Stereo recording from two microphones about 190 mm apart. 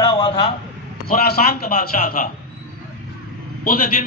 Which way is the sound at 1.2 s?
55° left (ahead or behind).